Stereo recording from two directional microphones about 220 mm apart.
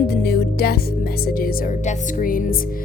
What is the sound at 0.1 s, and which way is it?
Music, 45° left (ahead or behind).